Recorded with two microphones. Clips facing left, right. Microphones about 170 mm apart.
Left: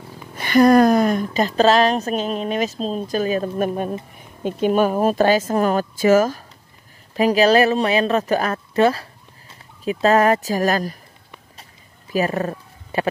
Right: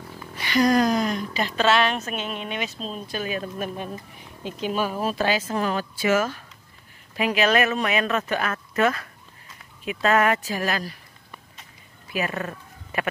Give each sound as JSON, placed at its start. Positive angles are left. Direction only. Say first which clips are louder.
{"t": 0.4, "sound": "speech", "louder": "left 7 dB", "side_deg": 50}
{"t": 12.1, "sound": "speech", "louder": "left 7 dB", "side_deg": 35}